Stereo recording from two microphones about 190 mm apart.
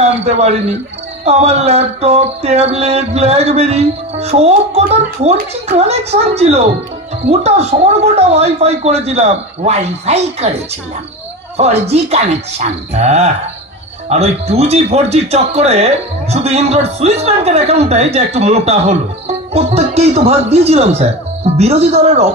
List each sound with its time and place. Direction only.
0.0 s a man's voice: 35° right (ahead or behind)